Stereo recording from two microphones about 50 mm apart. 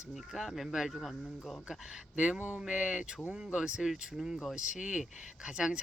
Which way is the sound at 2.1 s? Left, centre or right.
Centre.